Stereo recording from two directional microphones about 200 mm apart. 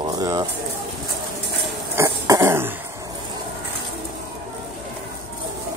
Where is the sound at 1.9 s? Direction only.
15° right (ahead or behind).